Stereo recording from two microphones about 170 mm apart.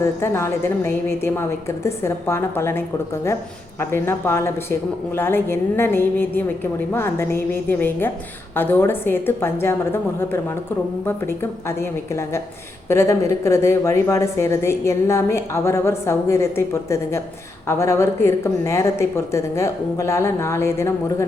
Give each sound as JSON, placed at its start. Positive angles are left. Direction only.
{"t": 0.0, "sound": "a woman's voice", "side_deg": 15}
{"t": 11.8, "sound": "a woman's voice", "side_deg": 15}